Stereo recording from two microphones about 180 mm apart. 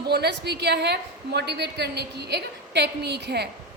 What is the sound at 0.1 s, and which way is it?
A woman's voice, 65° right (ahead or behind).